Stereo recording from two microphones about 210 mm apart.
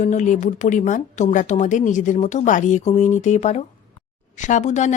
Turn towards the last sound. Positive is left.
turn(degrees=35)  # may be behind; listen again after turning